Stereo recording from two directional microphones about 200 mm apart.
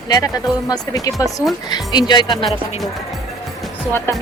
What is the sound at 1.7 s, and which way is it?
Speech, 20° left (ahead or behind).